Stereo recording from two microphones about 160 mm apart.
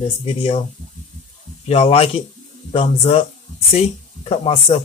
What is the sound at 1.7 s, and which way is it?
Speech, 40° left (ahead or behind).